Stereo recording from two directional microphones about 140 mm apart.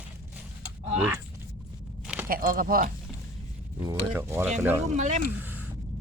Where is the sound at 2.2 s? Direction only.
90° right.